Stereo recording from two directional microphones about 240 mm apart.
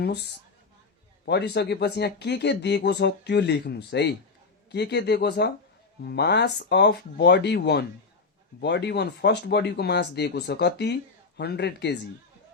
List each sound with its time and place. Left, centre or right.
0.0 s speech: left